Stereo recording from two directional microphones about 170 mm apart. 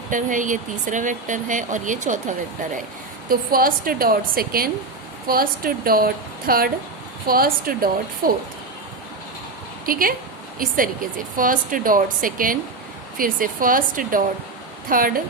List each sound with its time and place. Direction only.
0.1 s speech: 50° right (ahead or behind)
3.2 s a woman's voice: 60° right (ahead or behind)
9.8 s a woman's voice: 55° right (ahead or behind)